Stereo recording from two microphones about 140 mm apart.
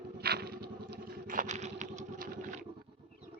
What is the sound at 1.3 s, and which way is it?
Vehicle, 65° right (ahead or behind).